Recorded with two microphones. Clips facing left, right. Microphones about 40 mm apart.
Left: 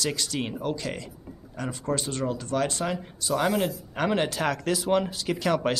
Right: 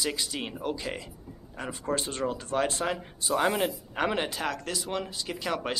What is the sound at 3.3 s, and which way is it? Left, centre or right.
Speech, centre.